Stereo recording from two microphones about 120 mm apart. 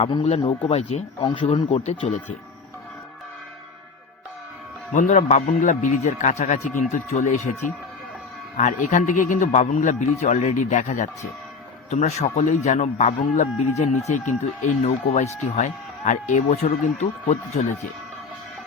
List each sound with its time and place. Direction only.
0.0 s speech: 50° left (ahead or behind)
1.5 s speech: 60° left (ahead or behind)
4.9 s a man's voice: 90° left
8.5 s a man's voice: 90° left
11.9 s speech: 70° left (ahead or behind); by 16.6 s 90° left
17.0 s speech: 75° left (ahead or behind)